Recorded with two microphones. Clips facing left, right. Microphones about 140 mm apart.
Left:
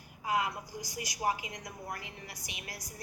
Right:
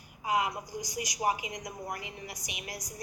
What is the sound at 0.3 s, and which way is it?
A woman's voice, 15° right (ahead or behind).